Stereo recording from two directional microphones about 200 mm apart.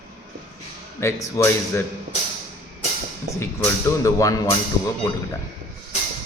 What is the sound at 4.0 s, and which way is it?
Speech, 15° left (ahead or behind).